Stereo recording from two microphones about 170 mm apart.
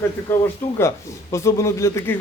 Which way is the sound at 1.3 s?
15° left (ahead or behind).